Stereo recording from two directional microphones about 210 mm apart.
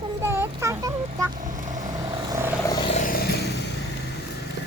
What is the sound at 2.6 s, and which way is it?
Vehicle, 20° left (ahead or behind).